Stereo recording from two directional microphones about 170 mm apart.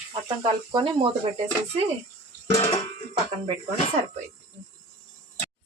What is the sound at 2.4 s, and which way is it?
Music, 35° left (ahead or behind).